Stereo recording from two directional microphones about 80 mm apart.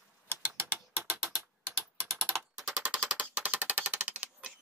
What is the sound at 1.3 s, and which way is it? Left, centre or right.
Tick-tock, centre.